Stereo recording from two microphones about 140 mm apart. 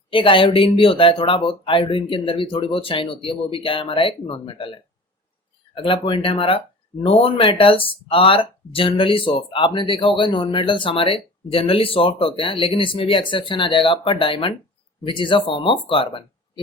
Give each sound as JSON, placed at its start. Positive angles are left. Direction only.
{"t": 0.1, "sound": "speech", "side_deg": 40}